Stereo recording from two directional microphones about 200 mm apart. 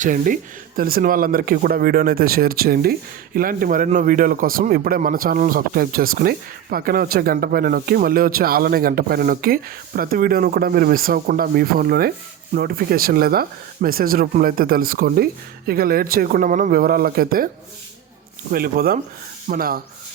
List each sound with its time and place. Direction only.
0.0 s speech: 40° right (ahead or behind)
18.5 s speech: 50° right (ahead or behind)